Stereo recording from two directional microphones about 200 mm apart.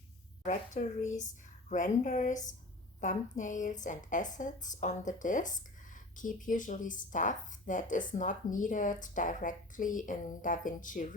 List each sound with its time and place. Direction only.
0.4 s speech: 40° left (ahead or behind)